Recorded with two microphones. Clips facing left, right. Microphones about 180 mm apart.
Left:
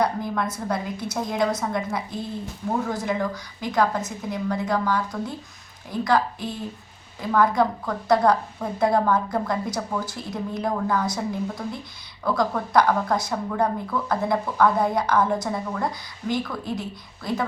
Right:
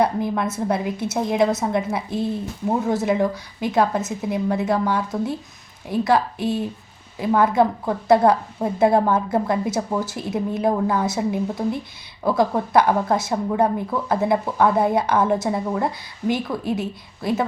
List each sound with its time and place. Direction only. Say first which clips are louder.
0.0 s a woman's voice: right 4 dB; 25° right (ahead or behind)